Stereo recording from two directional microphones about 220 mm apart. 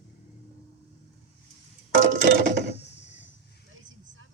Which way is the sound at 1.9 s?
55° right (ahead or behind).